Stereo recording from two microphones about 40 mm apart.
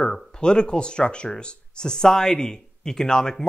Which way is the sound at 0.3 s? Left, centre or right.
Left.